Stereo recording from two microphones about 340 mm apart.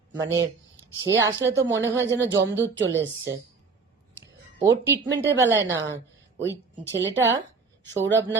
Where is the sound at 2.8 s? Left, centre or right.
Right.